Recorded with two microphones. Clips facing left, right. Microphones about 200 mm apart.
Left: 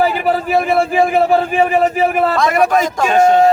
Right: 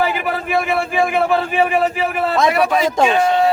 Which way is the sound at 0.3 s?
35° left (ahead or behind).